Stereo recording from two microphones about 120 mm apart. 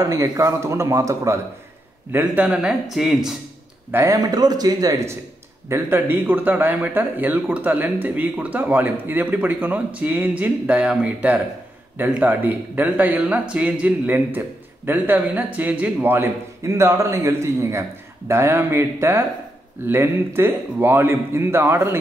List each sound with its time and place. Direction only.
0.0 s a man's voice: 30° right (ahead or behind)
2.1 s speech: 10° right (ahead or behind)
3.9 s speech: 25° right (ahead or behind)
5.7 s a man's voice: 20° right (ahead or behind)